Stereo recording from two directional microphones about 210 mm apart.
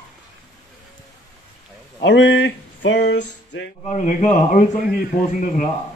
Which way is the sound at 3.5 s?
55° left (ahead or behind).